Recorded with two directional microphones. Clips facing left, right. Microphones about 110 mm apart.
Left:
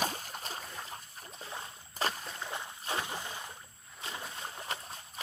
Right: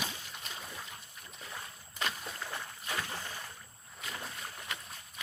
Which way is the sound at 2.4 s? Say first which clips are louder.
Left 1 dB; 20° left (ahead or behind).